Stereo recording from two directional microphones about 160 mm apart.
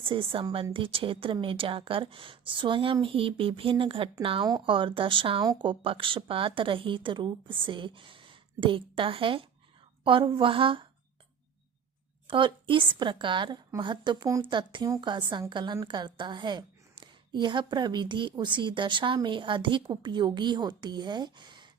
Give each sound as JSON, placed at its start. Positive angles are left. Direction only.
{"t": 0.0, "sound": "a woman's voice", "side_deg": -35}
{"t": 12.3, "sound": "a woman's voice", "side_deg": -30}